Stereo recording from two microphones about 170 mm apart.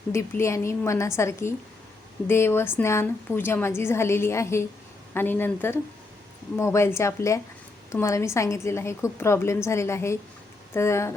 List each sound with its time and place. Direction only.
0.1 s a woman's voice: 15° left (ahead or behind)